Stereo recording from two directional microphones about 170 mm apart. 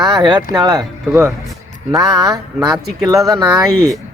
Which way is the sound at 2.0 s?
20° right (ahead or behind).